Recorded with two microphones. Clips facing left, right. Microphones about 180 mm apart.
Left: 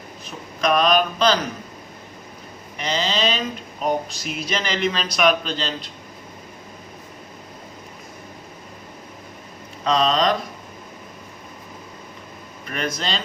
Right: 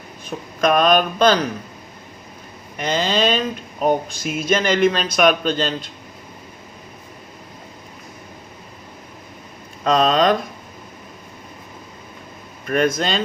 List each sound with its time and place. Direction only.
0.3 s speech: 50° right (ahead or behind)
2.7 s speech: 50° right (ahead or behind)
9.8 s speech: 50° right (ahead or behind)
12.6 s speech: 50° right (ahead or behind)